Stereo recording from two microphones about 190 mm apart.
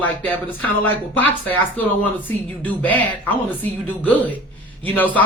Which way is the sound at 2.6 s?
10° left (ahead or behind).